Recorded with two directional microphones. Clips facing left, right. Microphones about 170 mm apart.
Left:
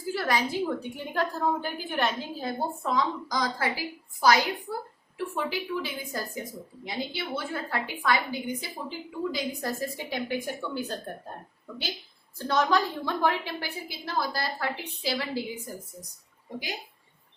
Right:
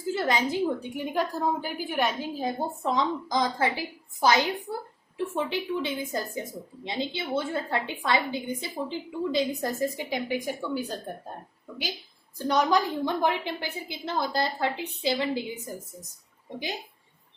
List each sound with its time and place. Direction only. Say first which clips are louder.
0.1 s a woman's voice: right 2 dB; 20° right (ahead or behind)
12.4 s a woman's voice: right 1 dB; 15° right (ahead or behind)